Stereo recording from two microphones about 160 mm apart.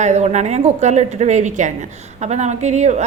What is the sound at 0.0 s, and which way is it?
A woman's voice, 45° right (ahead or behind).